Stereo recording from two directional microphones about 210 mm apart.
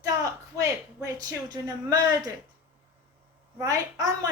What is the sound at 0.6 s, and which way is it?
A woman's voice, 15° right (ahead or behind).